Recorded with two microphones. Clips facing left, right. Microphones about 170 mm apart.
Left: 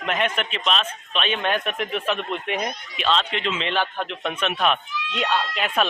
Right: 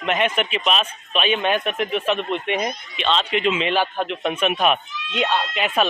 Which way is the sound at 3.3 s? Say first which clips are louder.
Right 5 dB; 10° right (ahead or behind).